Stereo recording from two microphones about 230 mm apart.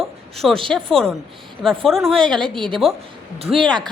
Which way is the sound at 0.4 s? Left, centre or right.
Centre.